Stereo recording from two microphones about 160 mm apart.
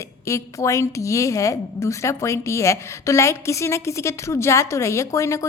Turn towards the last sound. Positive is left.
turn(degrees=20)  # may be behind; listen again after turning